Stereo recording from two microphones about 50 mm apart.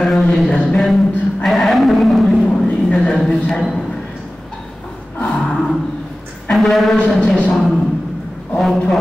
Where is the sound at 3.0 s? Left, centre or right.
Centre.